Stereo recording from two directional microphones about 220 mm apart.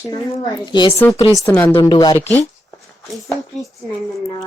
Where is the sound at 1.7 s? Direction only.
20° left (ahead or behind).